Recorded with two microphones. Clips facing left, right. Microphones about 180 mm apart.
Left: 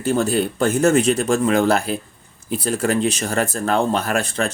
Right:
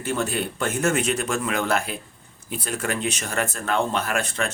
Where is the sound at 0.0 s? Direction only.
35° left (ahead or behind).